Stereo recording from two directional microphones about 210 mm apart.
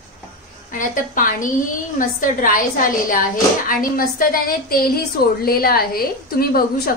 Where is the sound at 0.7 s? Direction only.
40° left (ahead or behind).